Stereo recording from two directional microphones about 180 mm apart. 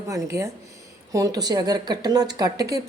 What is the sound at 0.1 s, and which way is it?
A woman's voice, 15° right (ahead or behind).